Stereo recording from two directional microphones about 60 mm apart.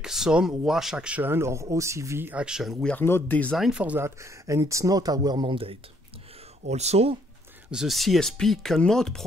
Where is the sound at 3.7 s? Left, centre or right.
Right.